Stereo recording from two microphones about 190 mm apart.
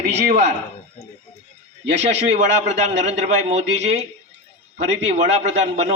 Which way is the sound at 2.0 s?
35° right (ahead or behind).